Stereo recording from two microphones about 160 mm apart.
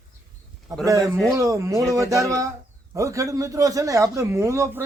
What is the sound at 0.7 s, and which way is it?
A man's voice, 20° right (ahead or behind).